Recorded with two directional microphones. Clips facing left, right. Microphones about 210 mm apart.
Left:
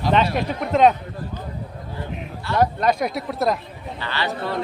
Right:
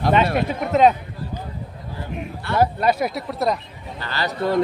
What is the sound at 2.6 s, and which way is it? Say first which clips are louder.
Speech: right 1 dB; 5° right (ahead or behind).